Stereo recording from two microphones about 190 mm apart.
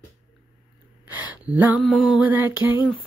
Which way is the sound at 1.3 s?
10° right (ahead or behind).